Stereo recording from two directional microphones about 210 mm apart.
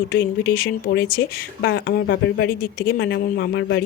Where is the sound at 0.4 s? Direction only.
45° left (ahead or behind).